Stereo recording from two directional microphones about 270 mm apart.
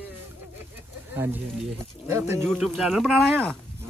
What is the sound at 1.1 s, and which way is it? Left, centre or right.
A man's voice, centre.